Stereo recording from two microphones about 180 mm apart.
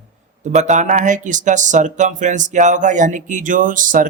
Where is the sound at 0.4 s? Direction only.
40° right (ahead or behind).